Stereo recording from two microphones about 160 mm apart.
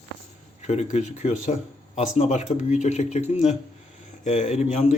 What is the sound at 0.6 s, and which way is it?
Speech, 45° left (ahead or behind).